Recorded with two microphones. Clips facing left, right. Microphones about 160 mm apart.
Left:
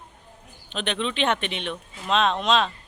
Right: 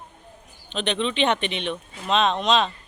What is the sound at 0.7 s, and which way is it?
Speech, 5° left (ahead or behind).